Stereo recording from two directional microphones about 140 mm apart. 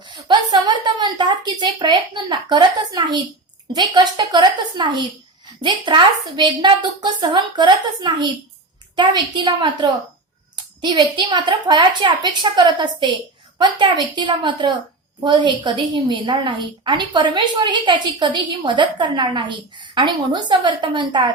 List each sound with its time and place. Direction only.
0.0 s a woman's voice: 30° right (ahead or behind)